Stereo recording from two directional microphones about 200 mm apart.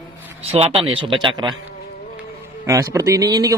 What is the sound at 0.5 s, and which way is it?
Speech, 30° right (ahead or behind).